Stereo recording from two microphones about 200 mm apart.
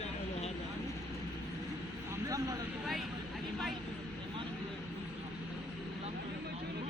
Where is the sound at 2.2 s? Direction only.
15° right (ahead or behind).